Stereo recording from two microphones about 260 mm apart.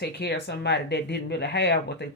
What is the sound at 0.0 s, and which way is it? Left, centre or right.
Speech, left.